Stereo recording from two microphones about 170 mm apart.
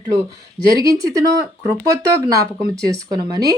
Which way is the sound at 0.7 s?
20° right (ahead or behind).